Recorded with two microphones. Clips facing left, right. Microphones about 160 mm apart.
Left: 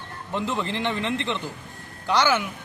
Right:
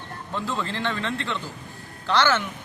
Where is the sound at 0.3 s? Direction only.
20° left (ahead or behind).